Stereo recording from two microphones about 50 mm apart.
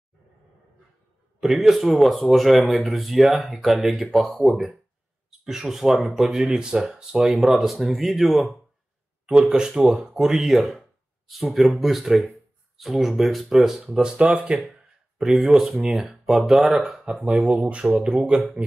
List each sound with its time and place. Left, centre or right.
1.7 s speech: centre
7.3 s speech: centre
9.2 s speech: centre
13.6 s speech: centre
14.2 s speech: right
15.1 s speech: centre